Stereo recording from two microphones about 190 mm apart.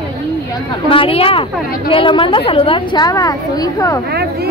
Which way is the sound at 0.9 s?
30° left (ahead or behind).